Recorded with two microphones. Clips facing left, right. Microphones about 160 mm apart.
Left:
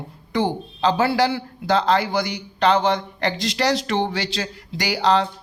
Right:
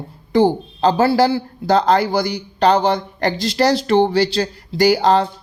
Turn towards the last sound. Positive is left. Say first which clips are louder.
# right 6 dB
turn(degrees=-45)  # may be behind; listen again after turning